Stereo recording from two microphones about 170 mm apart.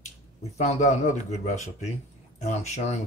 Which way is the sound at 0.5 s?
40° left (ahead or behind).